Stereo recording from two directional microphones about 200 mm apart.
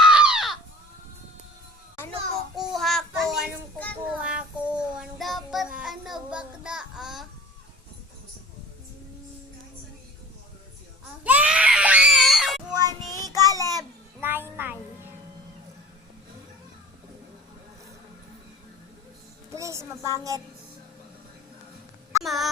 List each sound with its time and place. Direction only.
0.0 s a sound: 5° right (ahead or behind)
2.6 s child singing: centre (ahead or behind)
11.2 s baby cry: 5° right (ahead or behind)
12.7 s child singing: 20° right (ahead or behind)
19.5 s a woman's voice: 15° right (ahead or behind)
22.2 s a sound: centre (ahead or behind)